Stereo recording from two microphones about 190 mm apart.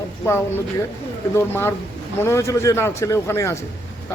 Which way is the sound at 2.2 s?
15° left (ahead or behind).